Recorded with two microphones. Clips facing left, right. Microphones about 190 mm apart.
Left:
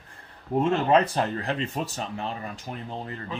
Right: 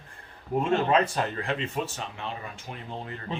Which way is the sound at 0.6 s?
35° left (ahead or behind).